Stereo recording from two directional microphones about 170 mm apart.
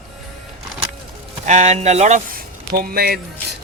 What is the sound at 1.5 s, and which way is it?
Speech, 45° right (ahead or behind).